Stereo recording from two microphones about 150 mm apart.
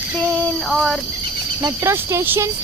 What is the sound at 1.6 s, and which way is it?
Speech, 20° right (ahead or behind).